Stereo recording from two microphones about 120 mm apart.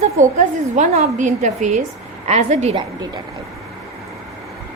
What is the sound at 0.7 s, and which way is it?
A woman's voice, 75° right (ahead or behind).